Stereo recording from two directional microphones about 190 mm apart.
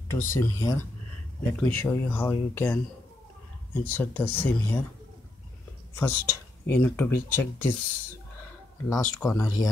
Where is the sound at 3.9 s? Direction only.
10° left (ahead or behind).